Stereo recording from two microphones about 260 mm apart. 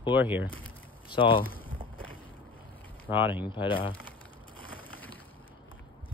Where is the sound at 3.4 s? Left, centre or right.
Centre.